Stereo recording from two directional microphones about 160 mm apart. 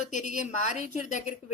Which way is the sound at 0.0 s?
50° left (ahead or behind).